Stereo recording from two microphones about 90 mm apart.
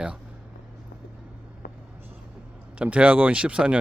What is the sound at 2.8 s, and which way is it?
Speech, 15° right (ahead or behind).